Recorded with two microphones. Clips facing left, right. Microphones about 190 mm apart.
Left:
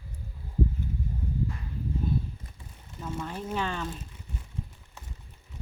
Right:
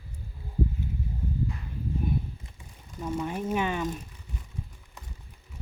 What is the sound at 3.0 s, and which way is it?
Speech, 10° right (ahead or behind).